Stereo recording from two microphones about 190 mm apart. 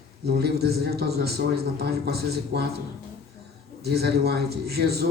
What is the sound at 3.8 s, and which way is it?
A man's voice, 60° right (ahead or behind).